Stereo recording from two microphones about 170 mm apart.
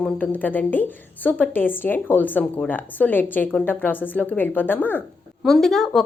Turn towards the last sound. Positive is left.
turn(degrees=0)  # may be behind; listen again after turning